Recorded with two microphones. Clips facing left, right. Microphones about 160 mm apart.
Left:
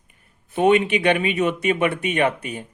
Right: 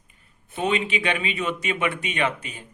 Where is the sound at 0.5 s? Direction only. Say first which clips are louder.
Left 8 dB; 60° left (ahead or behind).